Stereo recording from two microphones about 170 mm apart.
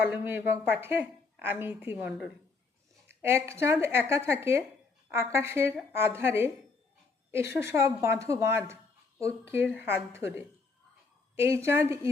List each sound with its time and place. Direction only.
0.0 s a woman's voice: 10° right (ahead or behind)
3.2 s a woman's voice: 15° right (ahead or behind)